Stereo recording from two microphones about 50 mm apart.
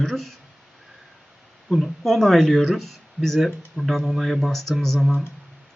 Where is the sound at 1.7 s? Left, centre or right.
Centre.